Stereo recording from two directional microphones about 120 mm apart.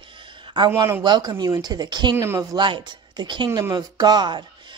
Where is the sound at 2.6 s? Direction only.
40° right (ahead or behind).